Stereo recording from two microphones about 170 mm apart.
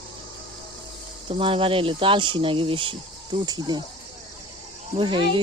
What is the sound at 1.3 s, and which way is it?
Speech, 30° right (ahead or behind).